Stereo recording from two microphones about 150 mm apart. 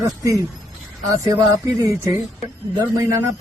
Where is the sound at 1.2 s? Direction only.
20° right (ahead or behind).